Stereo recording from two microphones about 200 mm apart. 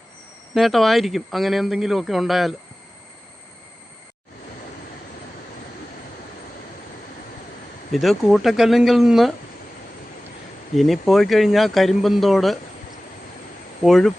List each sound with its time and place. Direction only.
0.5 s speech: centre (ahead or behind)
7.9 s speech: centre (ahead or behind)
10.8 s speech: centre (ahead or behind)
13.8 s speech: centre (ahead or behind)